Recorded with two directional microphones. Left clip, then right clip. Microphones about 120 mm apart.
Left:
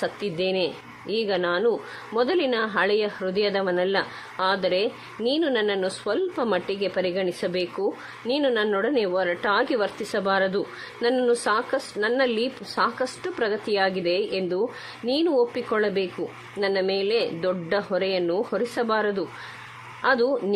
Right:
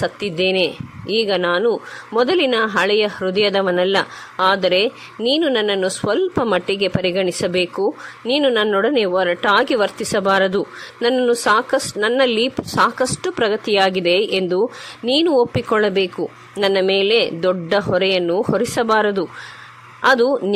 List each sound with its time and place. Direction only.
0.0 s a woman's voice: 30° right (ahead or behind)